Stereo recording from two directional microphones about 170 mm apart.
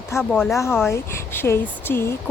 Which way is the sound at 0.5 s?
15° left (ahead or behind).